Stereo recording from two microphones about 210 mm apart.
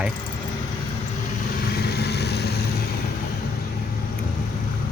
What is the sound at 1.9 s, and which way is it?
Vehicle, 50° left (ahead or behind).